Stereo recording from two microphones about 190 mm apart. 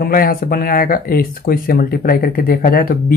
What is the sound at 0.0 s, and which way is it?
Speech, 50° left (ahead or behind).